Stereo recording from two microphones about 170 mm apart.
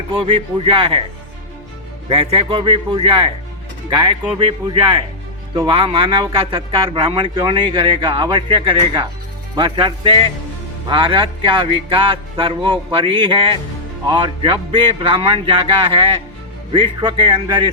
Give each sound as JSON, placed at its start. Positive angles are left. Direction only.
{"t": 0.2, "sound": "speech", "side_deg": -30}
{"t": 2.0, "sound": "a man's voice", "side_deg": -30}
{"t": 16.7, "sound": "a man's voice", "side_deg": -25}